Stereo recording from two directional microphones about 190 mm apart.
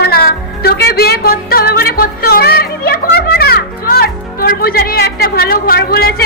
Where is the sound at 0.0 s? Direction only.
55° left (ahead or behind).